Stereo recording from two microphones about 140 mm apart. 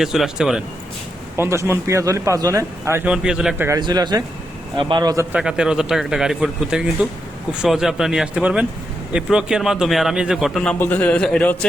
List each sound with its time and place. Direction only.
0.0 s a man's voice: 5° right (ahead or behind)
1.4 s speech: 20° right (ahead or behind)
3.1 s a man's voice: 5° right (ahead or behind)
3.7 s speech: 30° right (ahead or behind)
5.3 s a man's voice: 5° right (ahead or behind)